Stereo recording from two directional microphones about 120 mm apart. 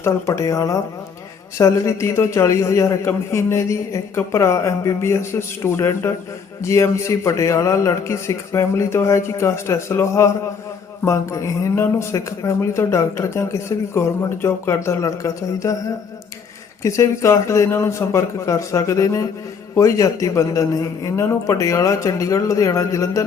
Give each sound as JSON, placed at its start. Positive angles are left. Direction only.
{"t": 0.0, "sound": "speech", "side_deg": 25}
{"t": 16.8, "sound": "speech", "side_deg": 25}